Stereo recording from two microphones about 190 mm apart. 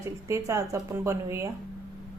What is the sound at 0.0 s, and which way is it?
Speech, 15° right (ahead or behind).